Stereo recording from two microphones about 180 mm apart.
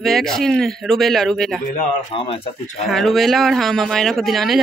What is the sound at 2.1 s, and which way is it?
Speech, 30° left (ahead or behind).